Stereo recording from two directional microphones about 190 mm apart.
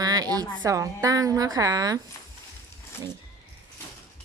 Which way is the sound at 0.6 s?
15° right (ahead or behind).